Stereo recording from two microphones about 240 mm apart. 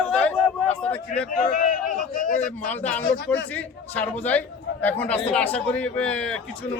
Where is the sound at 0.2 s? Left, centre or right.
Centre.